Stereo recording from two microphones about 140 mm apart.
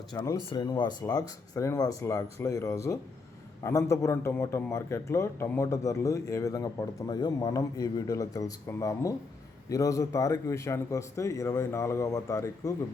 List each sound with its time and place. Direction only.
0.1 s a man's voice: 25° left (ahead or behind)